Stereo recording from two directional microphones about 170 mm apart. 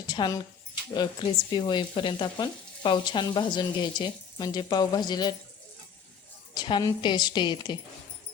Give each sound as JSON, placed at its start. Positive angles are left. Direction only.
{"t": 0.1, "sound": "speech", "side_deg": 25}
{"t": 6.5, "sound": "speech", "side_deg": 25}